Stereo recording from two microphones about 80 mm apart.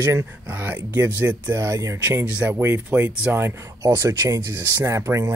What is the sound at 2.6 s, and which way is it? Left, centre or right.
Speech, right.